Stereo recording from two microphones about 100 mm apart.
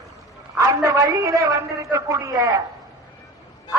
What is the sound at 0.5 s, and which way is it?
A man's voice, 30° right (ahead or behind).